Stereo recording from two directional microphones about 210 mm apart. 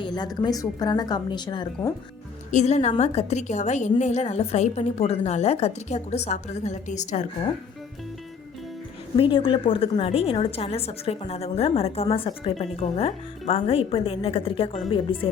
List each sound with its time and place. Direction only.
0.0 s a woman's voice: 20° left (ahead or behind)
2.5 s a woman's voice: 35° left (ahead or behind)
9.1 s a woman's voice: 25° left (ahead or behind)